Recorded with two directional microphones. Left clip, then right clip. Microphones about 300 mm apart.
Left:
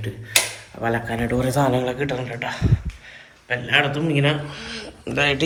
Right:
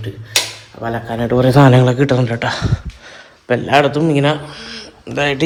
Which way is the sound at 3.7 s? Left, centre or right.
Centre.